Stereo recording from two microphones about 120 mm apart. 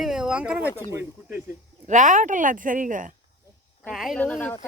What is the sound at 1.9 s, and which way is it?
Speech, 90° right.